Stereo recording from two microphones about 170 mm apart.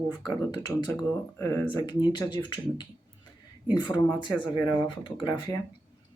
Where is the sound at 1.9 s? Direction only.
25° left (ahead or behind).